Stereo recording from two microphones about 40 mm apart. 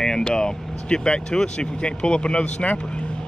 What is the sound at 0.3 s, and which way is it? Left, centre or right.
Speech, centre.